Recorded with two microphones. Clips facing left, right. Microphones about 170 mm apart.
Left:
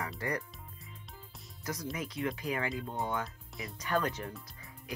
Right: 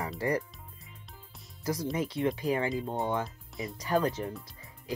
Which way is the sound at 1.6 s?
30° right (ahead or behind).